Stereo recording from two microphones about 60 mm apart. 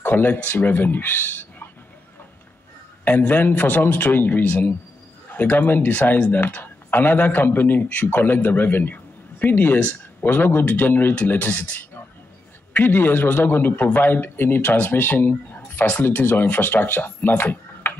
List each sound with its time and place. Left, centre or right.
0.0 s speech: left
3.1 s speech: left
17.4 s typing: left